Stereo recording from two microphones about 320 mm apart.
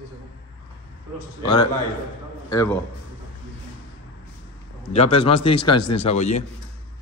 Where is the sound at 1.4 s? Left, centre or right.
Centre.